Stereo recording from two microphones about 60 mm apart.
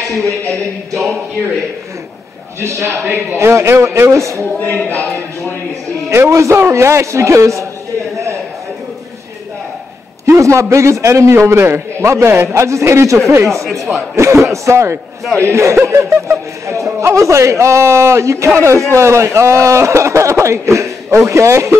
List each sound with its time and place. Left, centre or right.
2.6 s speech: right
4.6 s speech: left
6.0 s speech: right
10.2 s speech: right